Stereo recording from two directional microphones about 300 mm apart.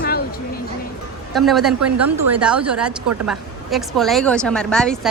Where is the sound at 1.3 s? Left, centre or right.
Centre.